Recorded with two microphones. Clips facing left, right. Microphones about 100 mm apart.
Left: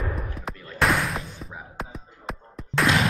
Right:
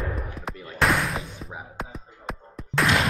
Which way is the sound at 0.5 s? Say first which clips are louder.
Right 2 dB; 15° right (ahead or behind).